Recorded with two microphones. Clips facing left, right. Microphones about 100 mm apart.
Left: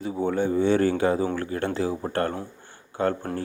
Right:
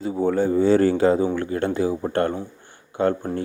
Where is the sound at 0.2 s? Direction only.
40° right (ahead or behind); by 1.9 s 20° right (ahead or behind).